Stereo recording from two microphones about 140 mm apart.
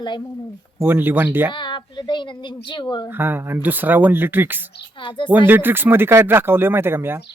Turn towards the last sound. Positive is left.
turn(degrees=-15)  # may be behind; listen again after turning